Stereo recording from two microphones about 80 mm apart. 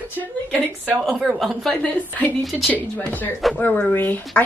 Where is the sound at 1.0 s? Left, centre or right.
Centre.